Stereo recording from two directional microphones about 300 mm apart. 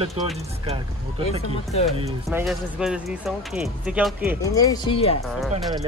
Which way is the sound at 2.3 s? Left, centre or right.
Centre.